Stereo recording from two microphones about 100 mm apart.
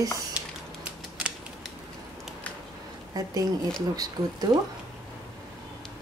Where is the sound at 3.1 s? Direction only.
40° right (ahead or behind).